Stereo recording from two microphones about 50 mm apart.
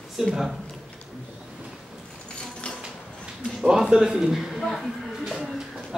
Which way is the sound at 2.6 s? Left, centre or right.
Left.